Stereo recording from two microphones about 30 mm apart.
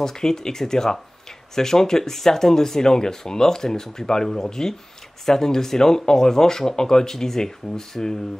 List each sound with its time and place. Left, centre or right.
0.0 s speech: centre